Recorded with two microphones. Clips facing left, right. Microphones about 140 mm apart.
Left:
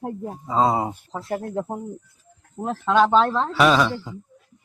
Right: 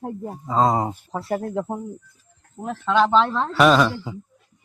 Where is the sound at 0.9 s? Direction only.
10° right (ahead or behind).